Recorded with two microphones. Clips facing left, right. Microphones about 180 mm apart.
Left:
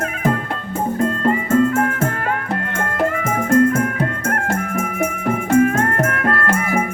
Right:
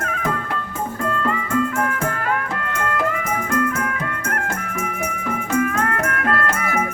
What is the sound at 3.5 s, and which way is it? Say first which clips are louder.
Music: left 9 dB; 45° left (ahead or behind).